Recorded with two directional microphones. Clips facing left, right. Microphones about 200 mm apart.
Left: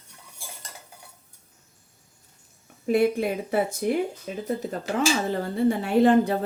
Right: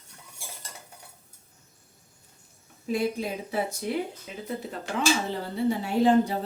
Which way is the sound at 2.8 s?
60° left (ahead or behind).